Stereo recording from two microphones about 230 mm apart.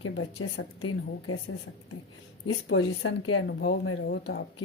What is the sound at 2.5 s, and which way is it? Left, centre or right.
Speech, left.